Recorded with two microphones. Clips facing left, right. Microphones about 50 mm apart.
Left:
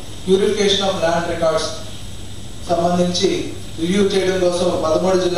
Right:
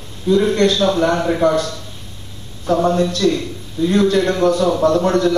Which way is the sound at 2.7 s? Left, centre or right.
Right.